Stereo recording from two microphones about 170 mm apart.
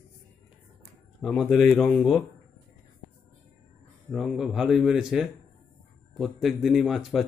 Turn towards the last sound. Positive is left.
turn(degrees=0)  # may be behind; listen again after turning